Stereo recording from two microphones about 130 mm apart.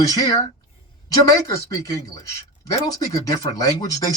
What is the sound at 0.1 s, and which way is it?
Speech, 30° left (ahead or behind).